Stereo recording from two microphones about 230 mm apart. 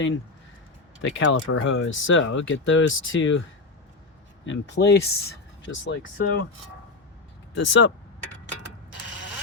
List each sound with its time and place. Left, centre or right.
1.0 s speech: left
4.4 s speech: left
7.5 s speech: left